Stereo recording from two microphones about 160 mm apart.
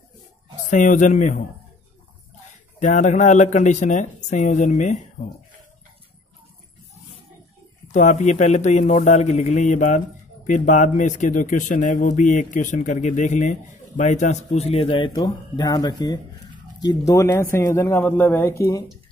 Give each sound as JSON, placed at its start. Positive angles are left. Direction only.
{"t": 0.7, "sound": "speech", "side_deg": 50}
{"t": 2.8, "sound": "speech", "side_deg": 50}
{"t": 7.9, "sound": "a man's voice", "side_deg": 50}